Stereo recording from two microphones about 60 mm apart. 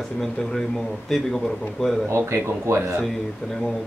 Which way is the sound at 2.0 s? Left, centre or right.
Right.